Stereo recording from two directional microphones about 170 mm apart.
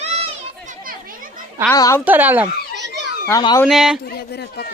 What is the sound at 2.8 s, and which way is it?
Children playing, 90° right.